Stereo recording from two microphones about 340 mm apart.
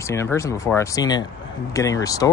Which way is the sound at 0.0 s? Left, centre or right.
Centre.